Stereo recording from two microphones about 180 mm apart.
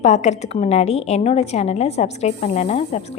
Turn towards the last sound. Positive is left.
turn(degrees=35)  # may be behind; listen again after turning